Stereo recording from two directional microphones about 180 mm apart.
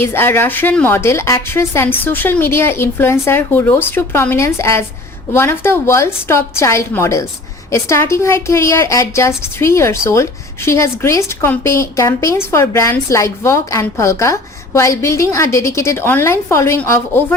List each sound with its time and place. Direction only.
0.0 s a woman's voice: 15° left (ahead or behind)